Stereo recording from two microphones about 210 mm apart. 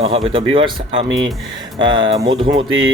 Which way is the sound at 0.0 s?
25° right (ahead or behind).